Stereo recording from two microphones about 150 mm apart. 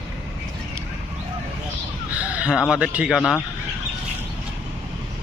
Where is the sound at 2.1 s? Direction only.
10° right (ahead or behind).